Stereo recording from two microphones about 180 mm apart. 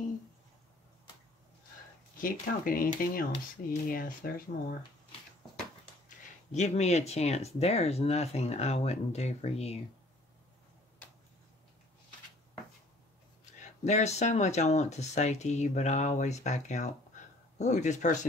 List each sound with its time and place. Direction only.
2.1 s speech: 50° left (ahead or behind)
6.0 s speech: 40° left (ahead or behind)
13.8 s speech: 40° left (ahead or behind)